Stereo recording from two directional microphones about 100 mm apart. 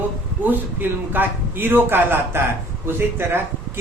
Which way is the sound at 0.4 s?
20° right (ahead or behind).